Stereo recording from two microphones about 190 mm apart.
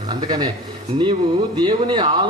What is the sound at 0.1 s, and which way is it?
Speech, 25° right (ahead or behind).